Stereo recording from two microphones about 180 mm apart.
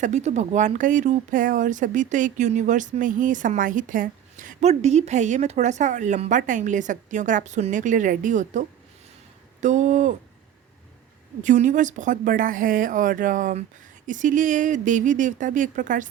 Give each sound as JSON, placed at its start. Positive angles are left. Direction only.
{"t": 0.0, "sound": "speech", "side_deg": -40}
{"t": 11.4, "sound": "speech", "side_deg": -45}